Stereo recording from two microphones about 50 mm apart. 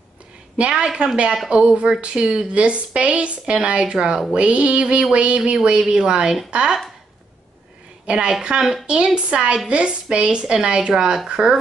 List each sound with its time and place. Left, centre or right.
0.6 s speech: right
8.1 s speech: centre